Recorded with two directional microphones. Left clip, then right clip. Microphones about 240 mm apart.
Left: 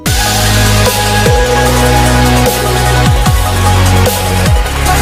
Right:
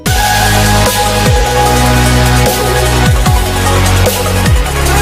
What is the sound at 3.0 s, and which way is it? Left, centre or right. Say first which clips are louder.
Music: even; centre.